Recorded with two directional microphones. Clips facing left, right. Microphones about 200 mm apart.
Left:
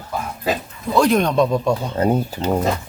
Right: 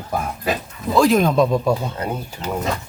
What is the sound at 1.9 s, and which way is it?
Speech, 35° left (ahead or behind).